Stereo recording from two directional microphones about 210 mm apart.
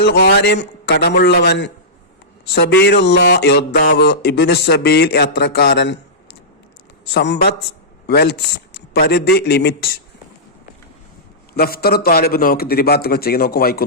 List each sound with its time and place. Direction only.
0.0 s a man's voice: 50° left (ahead or behind)
7.1 s a man's voice: 50° left (ahead or behind)
11.5 s a man's voice: 45° left (ahead or behind)